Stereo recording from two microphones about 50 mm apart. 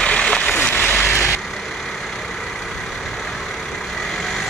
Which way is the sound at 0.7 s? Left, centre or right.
Left.